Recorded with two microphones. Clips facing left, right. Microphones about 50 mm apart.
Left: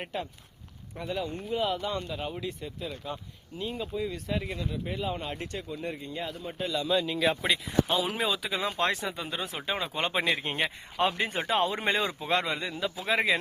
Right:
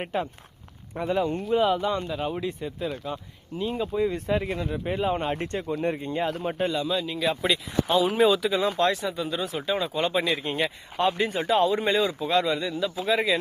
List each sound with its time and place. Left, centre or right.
0.0 s speech: right
1.5 s speech: centre
2.3 s speech: right
3.6 s speech: centre
3.9 s speech: right
6.3 s a man's voice: right
6.8 s speech: centre
8.4 s speech: centre
8.8 s speech: left